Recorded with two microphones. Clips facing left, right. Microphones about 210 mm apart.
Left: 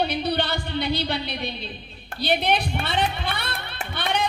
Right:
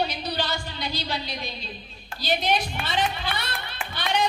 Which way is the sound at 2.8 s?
60° left (ahead or behind).